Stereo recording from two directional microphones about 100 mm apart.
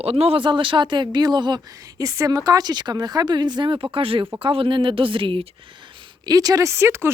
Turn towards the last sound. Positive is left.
turn(degrees=-25)  # may be behind; listen again after turning